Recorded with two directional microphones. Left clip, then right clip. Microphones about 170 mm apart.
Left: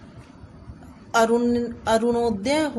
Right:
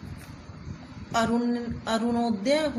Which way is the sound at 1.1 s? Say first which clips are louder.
Left 7 dB; 60° left (ahead or behind).